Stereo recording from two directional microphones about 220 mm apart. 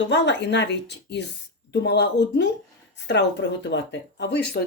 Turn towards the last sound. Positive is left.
turn(degrees=50)  # may be behind; listen again after turning